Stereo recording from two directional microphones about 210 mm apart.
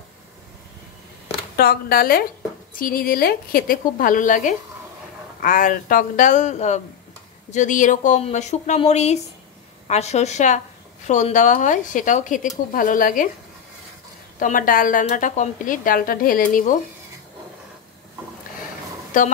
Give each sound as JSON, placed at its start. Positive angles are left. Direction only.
{"t": 1.6, "sound": "a woman's voice", "side_deg": 45}
{"t": 14.4, "sound": "a woman's voice", "side_deg": 40}
{"t": 19.1, "sound": "a woman's voice", "side_deg": 40}